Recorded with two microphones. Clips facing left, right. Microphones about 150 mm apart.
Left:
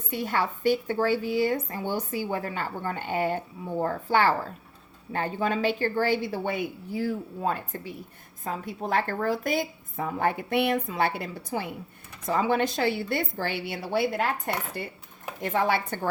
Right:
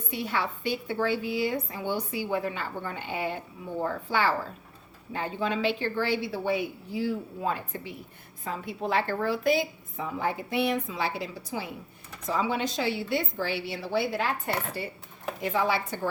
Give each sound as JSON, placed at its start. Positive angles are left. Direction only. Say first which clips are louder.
{"t": 0.1, "sound": "a woman's voice", "louder": "left 3 dB", "side_deg": 45}